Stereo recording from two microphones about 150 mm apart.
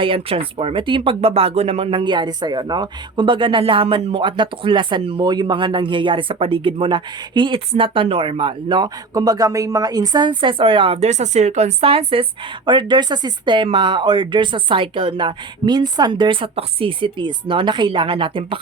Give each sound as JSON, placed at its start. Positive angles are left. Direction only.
{"t": 0.0, "sound": "speech", "side_deg": -35}